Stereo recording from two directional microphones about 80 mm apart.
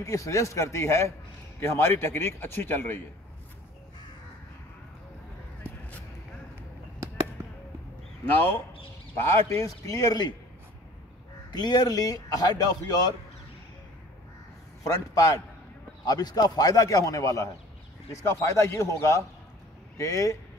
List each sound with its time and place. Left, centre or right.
0.0 s a man's voice: left
7.0 s a sound: right
8.3 s a man's voice: left
9.2 s a man's voice: left
9.7 s a man's voice: left
11.5 s speech: left
14.8 s a man's voice: left